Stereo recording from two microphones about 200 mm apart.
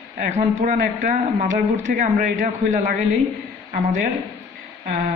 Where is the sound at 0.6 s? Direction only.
40° right (ahead or behind).